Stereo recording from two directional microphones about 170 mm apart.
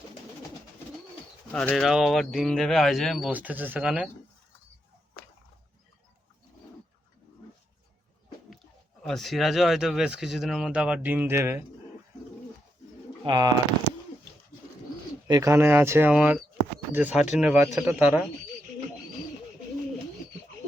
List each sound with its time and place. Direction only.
1.5 s speech: 10° left (ahead or behind)
1.7 s speech: centre (ahead or behind)
9.0 s speech: centre (ahead or behind); by 11.6 s 15° right (ahead or behind)
13.2 s speech: 20° right (ahead or behind)
15.3 s speech: 15° right (ahead or behind)